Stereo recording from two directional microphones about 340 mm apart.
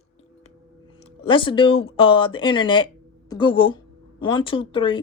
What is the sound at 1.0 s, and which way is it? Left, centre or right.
Speech, centre.